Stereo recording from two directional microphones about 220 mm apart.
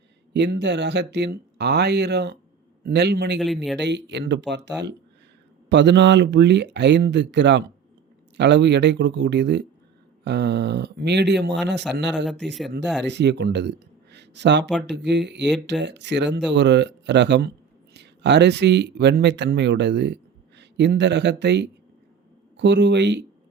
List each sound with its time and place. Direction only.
0.3 s speech: 50° right (ahead or behind)
3.4 s speech: centre (ahead or behind)
3.8 s speech: 50° right (ahead or behind)
12.2 s speech: centre (ahead or behind)
13.0 s speech: 50° right (ahead or behind)